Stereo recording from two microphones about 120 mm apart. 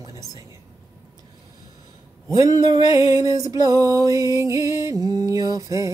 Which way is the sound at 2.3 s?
35° right (ahead or behind).